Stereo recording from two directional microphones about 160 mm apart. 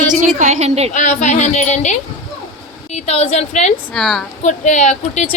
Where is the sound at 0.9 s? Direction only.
50° left (ahead or behind).